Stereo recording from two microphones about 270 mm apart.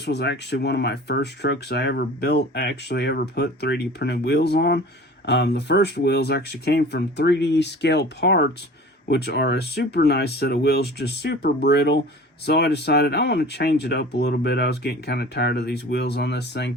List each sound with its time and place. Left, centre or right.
0.0 s speech: left